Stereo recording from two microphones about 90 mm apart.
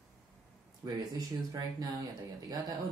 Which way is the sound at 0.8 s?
45° right (ahead or behind).